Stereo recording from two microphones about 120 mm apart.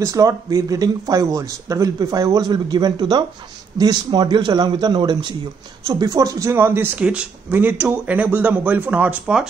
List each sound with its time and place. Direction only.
0.0 s a man's voice: 30° right (ahead or behind); by 9.5 s 5° right (ahead or behind)